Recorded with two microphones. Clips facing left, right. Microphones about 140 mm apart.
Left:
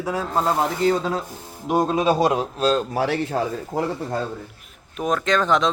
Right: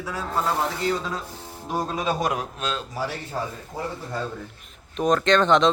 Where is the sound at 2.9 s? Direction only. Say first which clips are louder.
Left 7 dB; 75° left (ahead or behind).